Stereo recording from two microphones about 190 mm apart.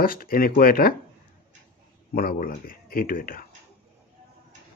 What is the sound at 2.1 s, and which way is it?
Speech, 50° left (ahead or behind).